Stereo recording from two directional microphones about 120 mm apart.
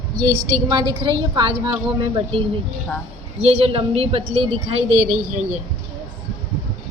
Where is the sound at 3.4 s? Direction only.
55° right (ahead or behind).